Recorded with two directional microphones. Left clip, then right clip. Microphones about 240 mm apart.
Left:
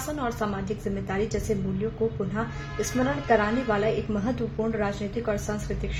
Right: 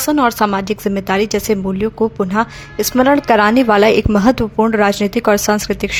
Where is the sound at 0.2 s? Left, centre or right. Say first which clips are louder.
Right 15 dB; right.